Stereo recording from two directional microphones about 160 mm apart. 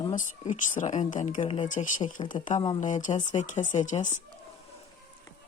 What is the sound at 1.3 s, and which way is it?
Speech, 35° left (ahead or behind).